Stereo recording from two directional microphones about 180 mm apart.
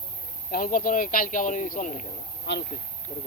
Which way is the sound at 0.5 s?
50° left (ahead or behind).